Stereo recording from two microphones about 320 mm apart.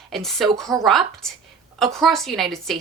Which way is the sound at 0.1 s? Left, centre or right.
Centre.